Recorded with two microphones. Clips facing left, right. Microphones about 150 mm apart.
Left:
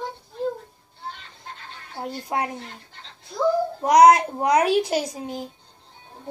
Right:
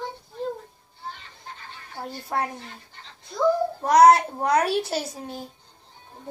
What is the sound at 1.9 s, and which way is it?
Speech, 15° left (ahead or behind).